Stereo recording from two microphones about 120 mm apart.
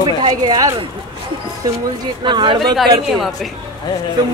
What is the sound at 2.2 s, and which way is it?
Speech, 40° right (ahead or behind).